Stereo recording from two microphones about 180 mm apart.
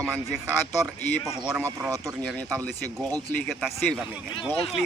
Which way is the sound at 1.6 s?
15° right (ahead or behind).